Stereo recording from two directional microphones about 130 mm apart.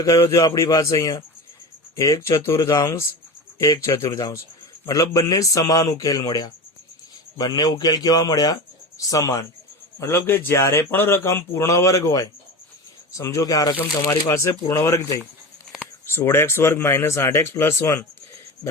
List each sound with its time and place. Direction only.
0.0 s speech: 25° left (ahead or behind)